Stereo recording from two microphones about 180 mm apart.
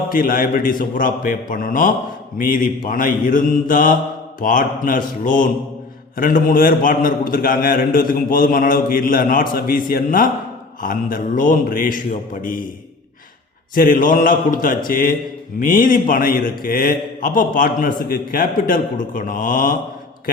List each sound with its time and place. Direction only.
0.1 s a man's voice: 50° left (ahead or behind)
13.7 s a man's voice: 50° left (ahead or behind)